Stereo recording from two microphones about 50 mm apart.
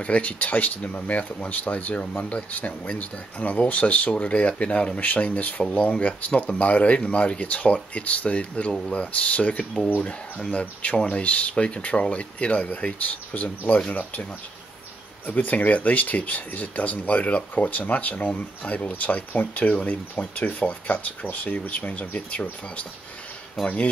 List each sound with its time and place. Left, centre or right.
0.0 s speech: left
15.2 s speech: left
23.6 s speech: centre